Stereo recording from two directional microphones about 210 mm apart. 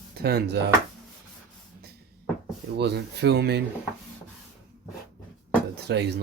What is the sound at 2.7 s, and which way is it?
Speech, 50° right (ahead or behind).